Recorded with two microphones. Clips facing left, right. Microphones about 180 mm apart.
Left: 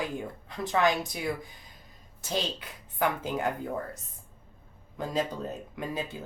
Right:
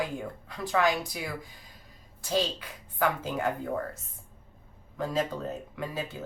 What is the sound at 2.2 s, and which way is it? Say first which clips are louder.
Speech: right 3 dB; 20° left (ahead or behind).